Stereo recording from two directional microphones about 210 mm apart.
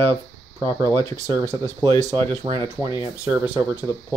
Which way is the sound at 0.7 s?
15° right (ahead or behind).